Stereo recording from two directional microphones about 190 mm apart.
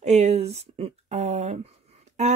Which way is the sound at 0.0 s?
35° right (ahead or behind).